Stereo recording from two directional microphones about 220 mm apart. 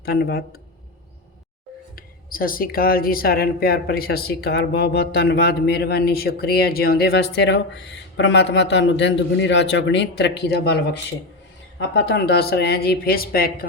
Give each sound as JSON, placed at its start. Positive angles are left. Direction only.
{"t": 0.0, "sound": "speech", "side_deg": 45}
{"t": 2.0, "sound": "speech", "side_deg": 40}
{"t": 11.9, "sound": "speech", "side_deg": 50}